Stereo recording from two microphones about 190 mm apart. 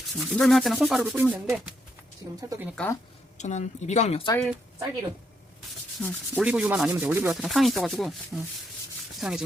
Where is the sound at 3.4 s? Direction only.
40° left (ahead or behind).